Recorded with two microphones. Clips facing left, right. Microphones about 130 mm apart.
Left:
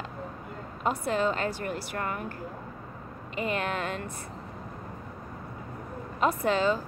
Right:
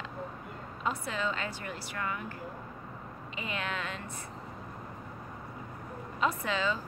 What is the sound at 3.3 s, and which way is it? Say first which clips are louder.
Speech: left 7 dB; 50° left (ahead or behind).